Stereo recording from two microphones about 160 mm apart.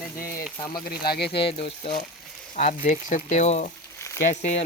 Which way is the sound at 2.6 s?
50° left (ahead or behind).